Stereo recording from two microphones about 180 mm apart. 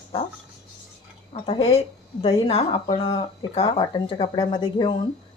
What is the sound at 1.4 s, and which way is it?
Speech, 30° left (ahead or behind).